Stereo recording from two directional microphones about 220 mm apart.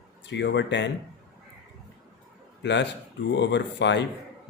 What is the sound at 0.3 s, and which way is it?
Speech, 50° left (ahead or behind).